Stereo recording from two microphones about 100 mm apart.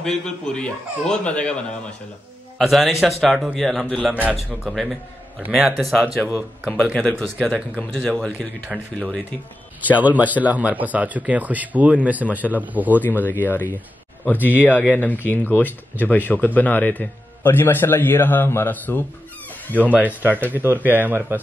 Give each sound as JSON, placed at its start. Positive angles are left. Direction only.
{"t": 0.0, "sound": "speech", "side_deg": 5}
{"t": 2.6, "sound": "speech", "side_deg": 0}
{"t": 4.1, "sound": "speech", "side_deg": -15}
{"t": 6.3, "sound": "speech", "side_deg": 10}
{"t": 9.9, "sound": "speech", "side_deg": -15}
{"t": 13.0, "sound": "speech", "side_deg": 20}
{"t": 20.1, "sound": "speech", "side_deg": -20}